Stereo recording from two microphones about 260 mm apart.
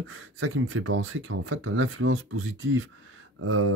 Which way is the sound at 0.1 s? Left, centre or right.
Right.